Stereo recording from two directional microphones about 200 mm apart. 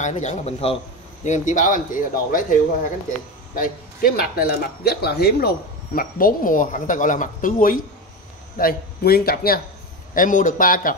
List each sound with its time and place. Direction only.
0.0 s speech: 35° left (ahead or behind)